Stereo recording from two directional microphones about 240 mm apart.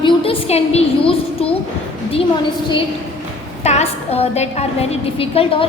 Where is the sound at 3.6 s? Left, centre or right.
Left.